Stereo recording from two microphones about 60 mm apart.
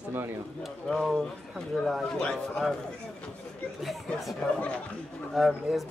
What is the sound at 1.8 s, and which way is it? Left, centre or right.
Speech, centre.